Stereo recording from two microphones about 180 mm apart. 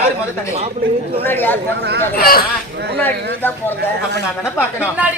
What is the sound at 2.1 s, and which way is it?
Speech, 55° left (ahead or behind).